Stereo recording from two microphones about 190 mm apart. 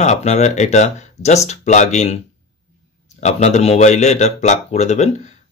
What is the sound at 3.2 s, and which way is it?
Speech, 35° left (ahead or behind).